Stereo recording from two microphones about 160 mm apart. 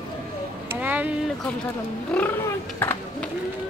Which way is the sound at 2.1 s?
5° left (ahead or behind).